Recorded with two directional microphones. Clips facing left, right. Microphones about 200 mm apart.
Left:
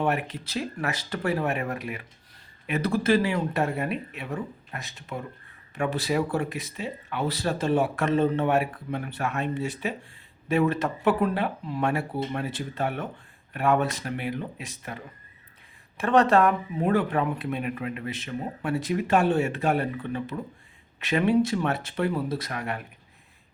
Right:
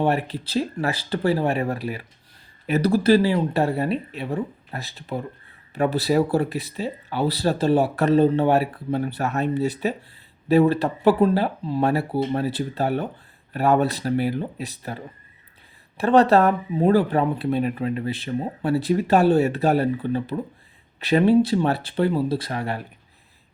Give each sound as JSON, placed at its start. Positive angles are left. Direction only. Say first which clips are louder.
{"t": 0.0, "sound": "speech", "louder": "right 4 dB", "side_deg": -35}